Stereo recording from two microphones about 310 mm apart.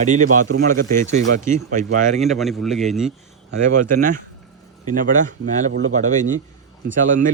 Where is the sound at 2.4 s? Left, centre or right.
Centre.